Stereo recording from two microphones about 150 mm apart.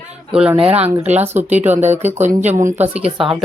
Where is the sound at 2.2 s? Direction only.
50° right (ahead or behind).